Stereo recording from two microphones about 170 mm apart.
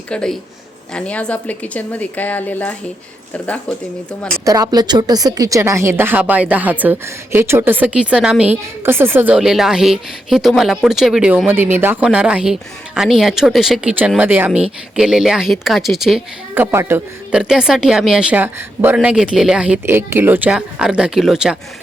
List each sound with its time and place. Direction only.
0.1 s a woman's voice: 5° left (ahead or behind)
4.4 s a woman's voice: 20° right (ahead or behind); by 21.6 s 5° right (ahead or behind)